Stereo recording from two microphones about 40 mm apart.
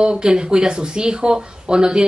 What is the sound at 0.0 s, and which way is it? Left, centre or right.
Speech, right.